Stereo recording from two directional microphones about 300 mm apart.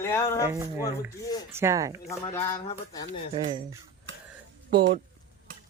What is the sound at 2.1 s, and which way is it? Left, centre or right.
Speech, centre.